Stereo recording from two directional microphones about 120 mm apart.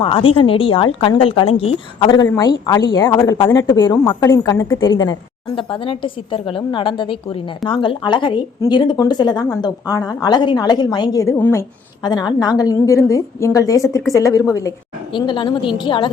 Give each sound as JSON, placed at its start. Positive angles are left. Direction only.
{"t": 0.0, "sound": "speech", "side_deg": 50}
{"t": 2.0, "sound": "a woman's voice", "side_deg": 35}
{"t": 5.5, "sound": "a woman's voice", "side_deg": 45}
{"t": 12.0, "sound": "a woman's voice", "side_deg": 35}
{"t": 15.1, "sound": "speech", "side_deg": 45}